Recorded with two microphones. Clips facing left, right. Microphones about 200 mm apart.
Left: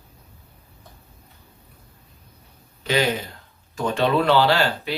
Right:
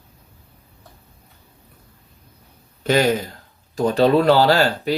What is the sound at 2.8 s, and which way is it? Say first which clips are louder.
Speech: right 5 dB; 45° right (ahead or behind).